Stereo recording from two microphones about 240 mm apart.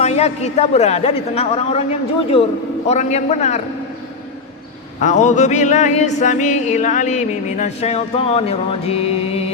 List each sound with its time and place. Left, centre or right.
0.0 s music: left
4.9 s music: left